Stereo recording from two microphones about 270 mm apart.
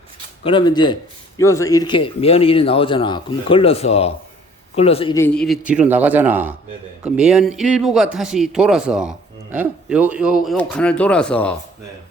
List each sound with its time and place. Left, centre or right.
0.4 s speech: centre